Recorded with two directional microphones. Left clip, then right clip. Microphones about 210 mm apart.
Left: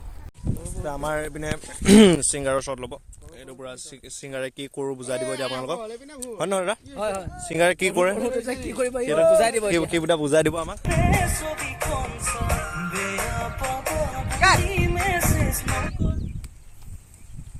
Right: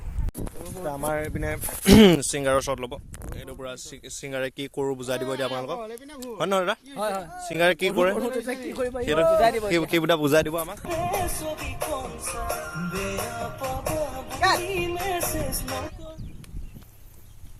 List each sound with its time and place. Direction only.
0.9 s speech: centre (ahead or behind)
2.0 s speech: 5° right (ahead or behind)
6.1 s speech: 10° left (ahead or behind)
6.9 s speech: centre (ahead or behind)
7.4 s speech: 20° left (ahead or behind)
8.7 s a man's voice: 60° left (ahead or behind)
9.6 s speech: centre (ahead or behind)
10.0 s a man's voice: 10° right (ahead or behind)
10.5 s speech: 25° left (ahead or behind)
10.8 s music: 35° right (ahead or behind)